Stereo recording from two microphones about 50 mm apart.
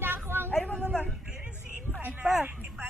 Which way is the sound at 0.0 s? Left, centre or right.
Right.